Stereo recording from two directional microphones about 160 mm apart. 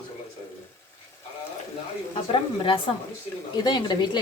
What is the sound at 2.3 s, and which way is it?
A woman's voice, 35° left (ahead or behind).